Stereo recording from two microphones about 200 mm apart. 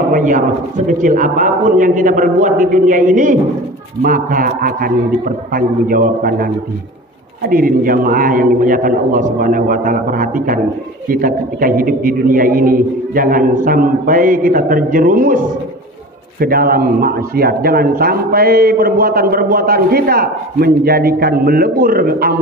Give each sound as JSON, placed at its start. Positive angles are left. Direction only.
{"t": 0.1, "sound": "a man's voice", "side_deg": -40}